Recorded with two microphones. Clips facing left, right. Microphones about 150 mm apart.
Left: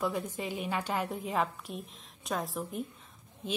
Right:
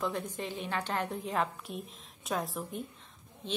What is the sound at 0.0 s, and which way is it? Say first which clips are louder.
A woman's voice: left 2 dB; 5° left (ahead or behind).